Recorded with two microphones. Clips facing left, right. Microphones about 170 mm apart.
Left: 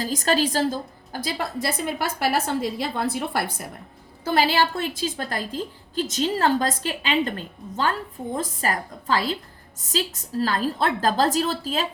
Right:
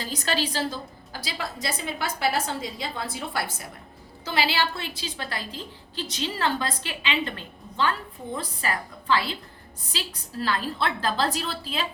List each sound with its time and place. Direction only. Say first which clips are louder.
0.0 s a woman's voice: left 6 dB; 45° left (ahead or behind)